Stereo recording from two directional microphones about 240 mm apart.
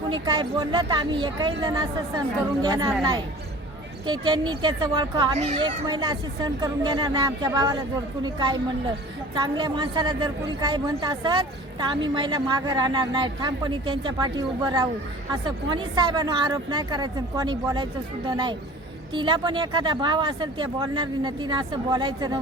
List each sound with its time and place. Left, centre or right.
0.1 s a woman's voice: centre